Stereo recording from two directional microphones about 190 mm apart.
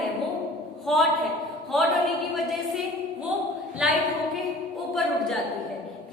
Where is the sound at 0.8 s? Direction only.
Centre (ahead or behind).